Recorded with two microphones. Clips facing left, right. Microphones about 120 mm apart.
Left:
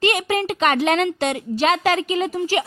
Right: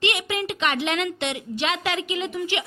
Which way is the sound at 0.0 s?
45° left (ahead or behind).